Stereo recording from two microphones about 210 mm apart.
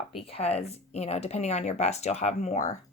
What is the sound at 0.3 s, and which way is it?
Speech, 30° left (ahead or behind).